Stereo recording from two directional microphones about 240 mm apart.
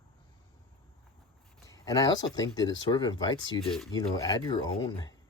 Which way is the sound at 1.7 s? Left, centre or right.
Centre.